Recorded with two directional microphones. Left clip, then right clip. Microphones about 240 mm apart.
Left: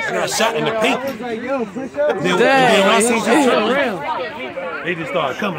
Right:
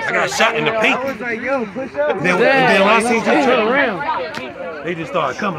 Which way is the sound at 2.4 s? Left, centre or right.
Centre.